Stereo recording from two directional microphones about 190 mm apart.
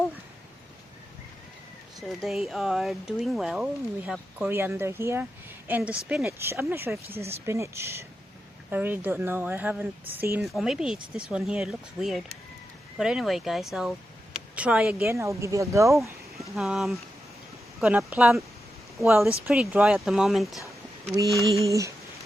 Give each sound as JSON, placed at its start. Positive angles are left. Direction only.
{"t": 2.0, "sound": "speech", "side_deg": 0}
{"t": 16.6, "sound": "speech", "side_deg": 0}
{"t": 21.7, "sound": "speech", "side_deg": -15}